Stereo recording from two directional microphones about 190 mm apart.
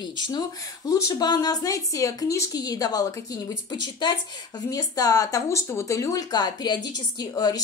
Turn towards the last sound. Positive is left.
turn(degrees=20)  # may be behind; listen again after turning